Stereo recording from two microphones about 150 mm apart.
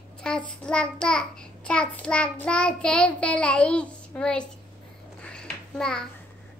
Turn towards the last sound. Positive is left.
turn(degrees=5)  # may be behind; listen again after turning